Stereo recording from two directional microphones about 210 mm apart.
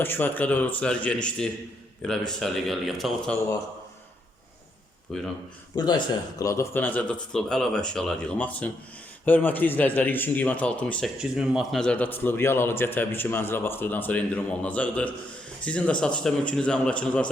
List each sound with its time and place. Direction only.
0.0 s a man's voice: 10° left (ahead or behind)
5.1 s speech: centre (ahead or behind)
5.7 s a man's voice: 20° left (ahead or behind)